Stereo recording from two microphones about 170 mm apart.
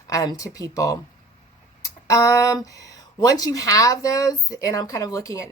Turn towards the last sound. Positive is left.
turn(degrees=20)  # may be behind; listen again after turning